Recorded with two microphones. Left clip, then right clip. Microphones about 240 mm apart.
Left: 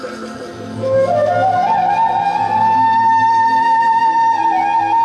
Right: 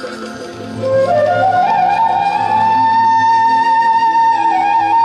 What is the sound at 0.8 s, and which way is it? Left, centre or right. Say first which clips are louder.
Music: right 2 dB; right.